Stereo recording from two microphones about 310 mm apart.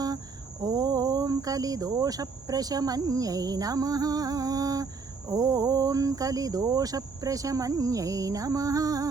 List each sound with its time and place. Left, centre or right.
0.6 s speech: centre